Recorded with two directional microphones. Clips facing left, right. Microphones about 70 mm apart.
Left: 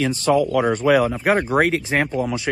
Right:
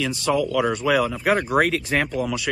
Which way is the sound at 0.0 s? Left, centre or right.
Left.